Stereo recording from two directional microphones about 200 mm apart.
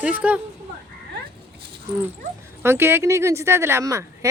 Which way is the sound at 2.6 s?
10° right (ahead or behind).